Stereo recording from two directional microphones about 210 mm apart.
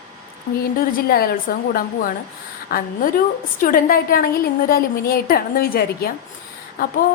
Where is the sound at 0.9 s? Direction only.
45° left (ahead or behind).